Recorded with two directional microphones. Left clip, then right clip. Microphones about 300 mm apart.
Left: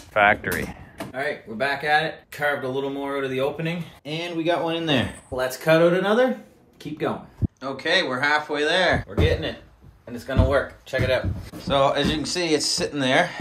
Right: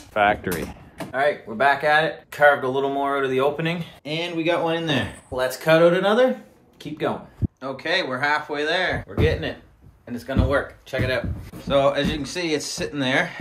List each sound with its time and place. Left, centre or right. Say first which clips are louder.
0.1 s speech: left 1 dB; centre